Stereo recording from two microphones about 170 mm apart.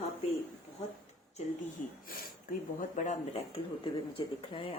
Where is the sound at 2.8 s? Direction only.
45° left (ahead or behind).